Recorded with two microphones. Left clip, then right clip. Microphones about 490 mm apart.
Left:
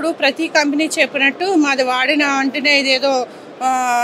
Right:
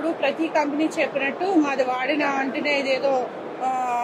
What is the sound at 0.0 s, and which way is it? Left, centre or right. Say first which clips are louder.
A woman's voice: left 6 dB; left.